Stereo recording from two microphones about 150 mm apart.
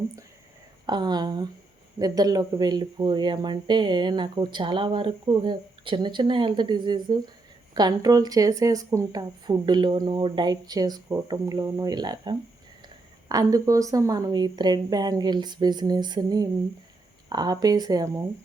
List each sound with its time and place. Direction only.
0.9 s speech: 30° right (ahead or behind)